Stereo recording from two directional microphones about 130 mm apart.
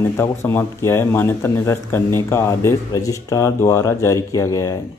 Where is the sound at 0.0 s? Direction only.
20° left (ahead or behind).